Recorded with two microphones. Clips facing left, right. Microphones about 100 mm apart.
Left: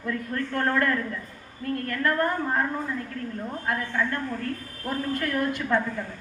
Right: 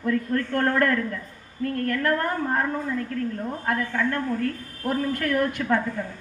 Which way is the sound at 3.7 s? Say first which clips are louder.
Right 2 dB; 50° right (ahead or behind).